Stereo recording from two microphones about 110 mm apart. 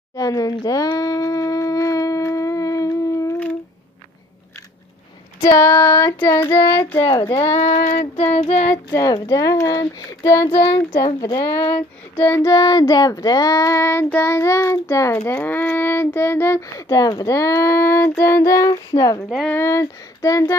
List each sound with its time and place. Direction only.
0.1 s wind instrument: 30° left (ahead or behind)
5.5 s child singing: 30° left (ahead or behind)
7.3 s female singing: 75° left (ahead or behind)
8.4 s child singing: 85° left
8.9 s speech: 35° left (ahead or behind)
11.7 s child singing: 20° left (ahead or behind)
12.5 s child singing: 35° left (ahead or behind)
16.8 s speech: 35° left (ahead or behind)
19.6 s child singing: 30° left (ahead or behind)